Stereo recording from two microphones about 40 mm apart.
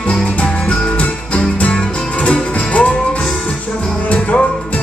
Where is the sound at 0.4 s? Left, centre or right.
Left.